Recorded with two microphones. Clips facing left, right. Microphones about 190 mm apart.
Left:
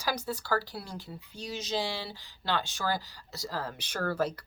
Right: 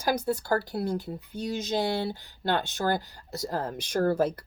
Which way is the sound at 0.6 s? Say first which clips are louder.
Right 8 dB; 55° right (ahead or behind).